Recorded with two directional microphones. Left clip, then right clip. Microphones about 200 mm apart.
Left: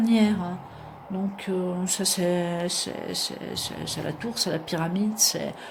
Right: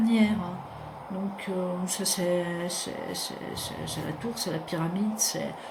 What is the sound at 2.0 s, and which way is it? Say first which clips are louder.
Speech: left 2 dB; 50° left (ahead or behind).